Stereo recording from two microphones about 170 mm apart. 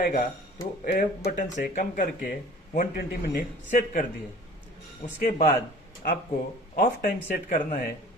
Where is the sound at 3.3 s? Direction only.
55° left (ahead or behind).